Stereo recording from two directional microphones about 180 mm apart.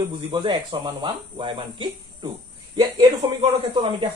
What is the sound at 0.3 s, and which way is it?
Speech, 25° right (ahead or behind).